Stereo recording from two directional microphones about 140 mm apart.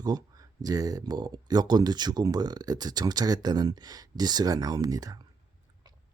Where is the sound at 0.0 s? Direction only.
30° right (ahead or behind).